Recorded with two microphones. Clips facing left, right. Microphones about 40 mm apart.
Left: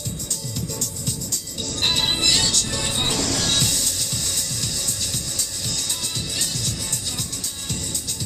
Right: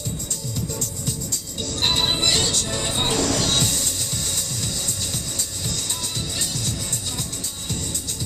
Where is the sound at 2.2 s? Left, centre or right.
Right.